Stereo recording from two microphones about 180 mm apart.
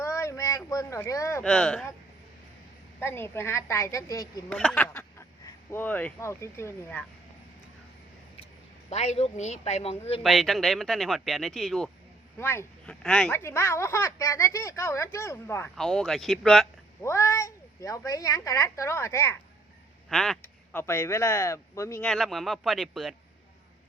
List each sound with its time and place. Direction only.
0.0 s a sound: 15° left (ahead or behind)
1.5 s speech: 5° left (ahead or behind)
3.0 s speech: 15° left (ahead or behind)
4.4 s speech: 5° left (ahead or behind)
8.9 s speech: 35° left (ahead or behind)
10.2 s speech: centre (ahead or behind)
12.4 s speech: 15° left (ahead or behind)
17.0 s speech: 15° left (ahead or behind)
20.1 s speech: 5° left (ahead or behind)
20.4 s speech: 15° left (ahead or behind)
22.0 s speech: centre (ahead or behind)